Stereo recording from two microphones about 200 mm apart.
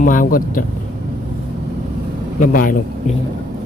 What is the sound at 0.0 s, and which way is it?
Speech, 40° left (ahead or behind).